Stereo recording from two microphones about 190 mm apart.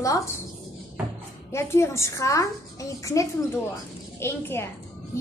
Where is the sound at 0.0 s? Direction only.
15° left (ahead or behind).